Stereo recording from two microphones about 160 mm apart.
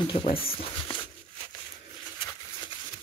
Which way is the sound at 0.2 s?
35° left (ahead or behind).